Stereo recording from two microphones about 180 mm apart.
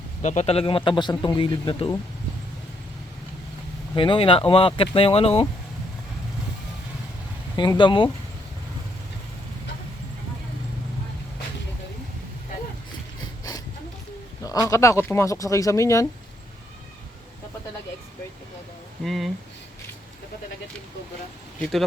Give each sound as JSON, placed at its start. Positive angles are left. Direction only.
{"t": 0.2, "sound": "speech", "side_deg": 40}
{"t": 3.9, "sound": "speech", "side_deg": 30}
{"t": 7.5, "sound": "speech", "side_deg": 25}
{"t": 14.4, "sound": "speech", "side_deg": 20}
{"t": 19.0, "sound": "speech", "side_deg": 0}